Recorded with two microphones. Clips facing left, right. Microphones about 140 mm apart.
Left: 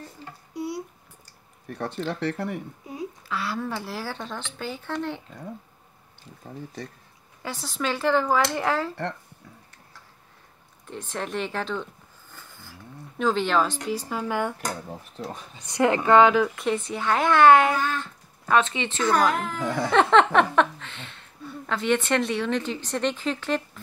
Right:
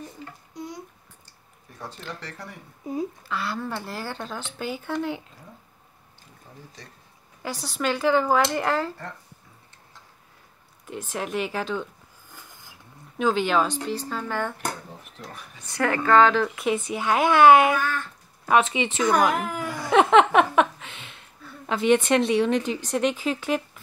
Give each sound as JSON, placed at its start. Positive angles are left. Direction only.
{"t": 0.6, "sound": "a sound", "side_deg": 10}
{"t": 1.7, "sound": "speech", "side_deg": 70}
{"t": 3.3, "sound": "speech", "side_deg": 0}
{"t": 7.4, "sound": "speech", "side_deg": 0}
{"t": 10.9, "sound": "a sound", "side_deg": -5}
{"t": 13.2, "sound": "speech", "side_deg": -5}
{"t": 13.8, "sound": "a woman's voice", "side_deg": 10}
{"t": 16.4, "sound": "speech", "side_deg": -5}
{"t": 17.7, "sound": "speech", "side_deg": 20}
{"t": 18.5, "sound": "speech", "side_deg": -15}
{"t": 19.9, "sound": "a sound", "side_deg": -10}
{"t": 21.6, "sound": "speech", "side_deg": -15}